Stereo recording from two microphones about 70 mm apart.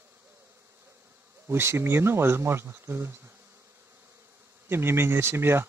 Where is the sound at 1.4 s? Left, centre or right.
Right.